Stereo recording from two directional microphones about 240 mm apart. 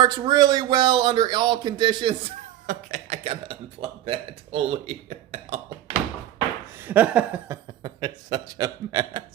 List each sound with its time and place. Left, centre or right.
0.0 s a man's voice: centre
2.6 s a man's voice: right
6.8 s speech: centre